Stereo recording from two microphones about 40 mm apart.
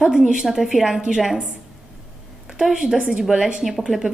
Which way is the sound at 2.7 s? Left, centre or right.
Centre.